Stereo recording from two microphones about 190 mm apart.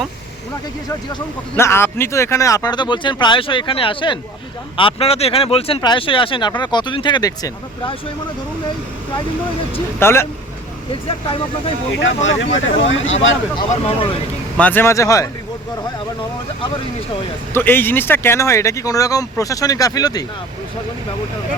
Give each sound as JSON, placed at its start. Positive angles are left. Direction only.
{"t": 1.5, "sound": "speech", "side_deg": 10}
{"t": 10.0, "sound": "speech", "side_deg": 15}
{"t": 11.0, "sound": "speech", "side_deg": 30}
{"t": 11.9, "sound": "speech", "side_deg": 90}
{"t": 13.8, "sound": "speech", "side_deg": 30}
{"t": 14.6, "sound": "speech", "side_deg": 10}
{"t": 17.5, "sound": "speech", "side_deg": 10}